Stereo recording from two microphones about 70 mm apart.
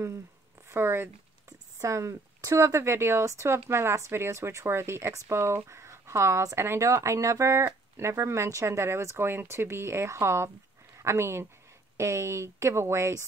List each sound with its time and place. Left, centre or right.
0.7 s speech: right
1.8 s speech: right